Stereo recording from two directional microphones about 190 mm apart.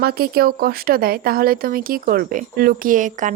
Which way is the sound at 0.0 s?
55° right (ahead or behind).